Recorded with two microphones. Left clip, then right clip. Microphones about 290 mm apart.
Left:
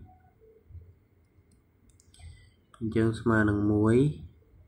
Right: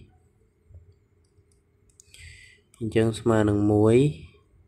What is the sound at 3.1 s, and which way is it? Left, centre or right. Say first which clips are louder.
Speech: right 4 dB; right.